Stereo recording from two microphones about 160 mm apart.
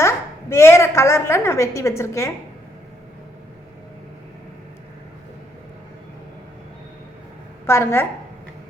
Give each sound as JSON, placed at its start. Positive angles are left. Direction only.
{"t": 0.5, "sound": "a woman's voice", "side_deg": 15}
{"t": 7.7, "sound": "a woman's voice", "side_deg": 15}